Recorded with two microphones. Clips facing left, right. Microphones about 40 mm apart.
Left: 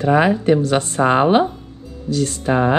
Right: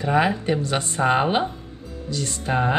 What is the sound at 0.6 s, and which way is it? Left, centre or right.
Speech, left.